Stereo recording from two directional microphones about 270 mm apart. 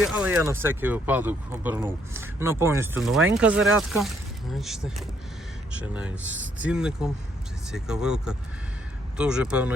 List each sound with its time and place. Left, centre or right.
0.0 s speech: centre